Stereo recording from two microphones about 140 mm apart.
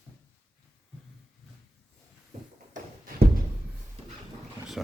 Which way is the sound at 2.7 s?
90° right.